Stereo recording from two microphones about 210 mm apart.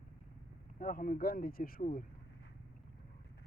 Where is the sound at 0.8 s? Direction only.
40° left (ahead or behind).